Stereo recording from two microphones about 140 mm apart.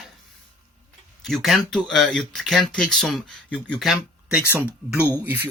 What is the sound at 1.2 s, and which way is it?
Speech, centre (ahead or behind).